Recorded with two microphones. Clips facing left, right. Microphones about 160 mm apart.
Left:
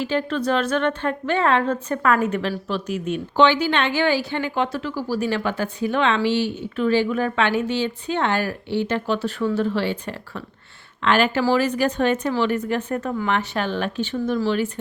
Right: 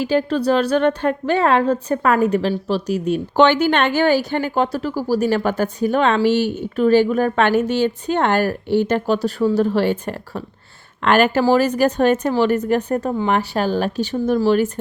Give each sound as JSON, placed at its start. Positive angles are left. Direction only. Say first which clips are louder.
{"t": 0.0, "sound": "a woman's voice", "louder": "right 5 dB", "side_deg": -40}